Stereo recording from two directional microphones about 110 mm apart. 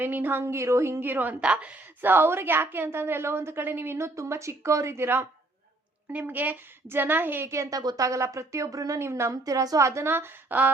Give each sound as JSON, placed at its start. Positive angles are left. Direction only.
{"t": 0.0, "sound": "a woman's voice", "side_deg": -15}